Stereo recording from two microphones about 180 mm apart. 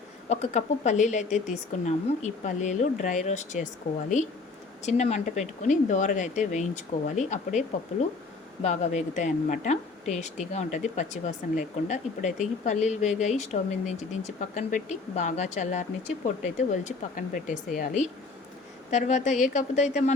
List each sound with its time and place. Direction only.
0.3 s speech: 40° left (ahead or behind)
4.9 s speech: 40° left (ahead or behind)
8.6 s speech: 40° left (ahead or behind)